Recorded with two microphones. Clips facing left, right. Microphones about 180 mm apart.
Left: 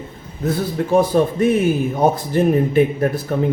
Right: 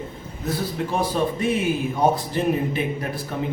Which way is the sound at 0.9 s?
45° left (ahead or behind).